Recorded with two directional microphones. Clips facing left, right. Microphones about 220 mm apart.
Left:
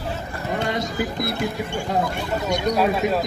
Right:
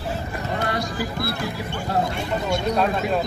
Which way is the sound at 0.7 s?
20° left (ahead or behind).